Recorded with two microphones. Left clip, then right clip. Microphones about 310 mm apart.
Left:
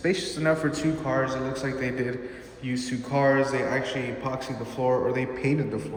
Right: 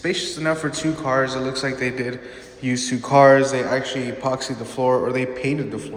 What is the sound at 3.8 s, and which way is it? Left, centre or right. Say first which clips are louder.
Speech: right 6 dB; right.